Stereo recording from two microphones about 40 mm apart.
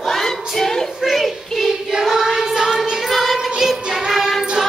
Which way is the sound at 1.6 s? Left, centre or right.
Centre.